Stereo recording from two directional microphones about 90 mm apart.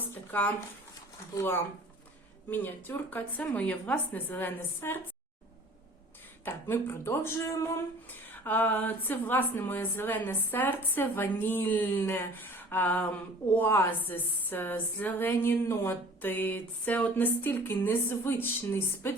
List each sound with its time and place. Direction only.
0.1 s a sound: 20° left (ahead or behind)
2.5 s speech: 20° left (ahead or behind)
6.4 s speech: 25° left (ahead or behind)
8.3 s speech: 20° left (ahead or behind)